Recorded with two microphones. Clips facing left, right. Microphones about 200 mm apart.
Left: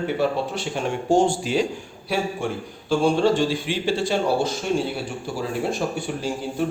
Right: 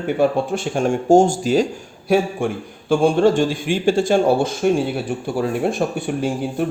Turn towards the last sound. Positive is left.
turn(degrees=-55)  # may be behind; listen again after turning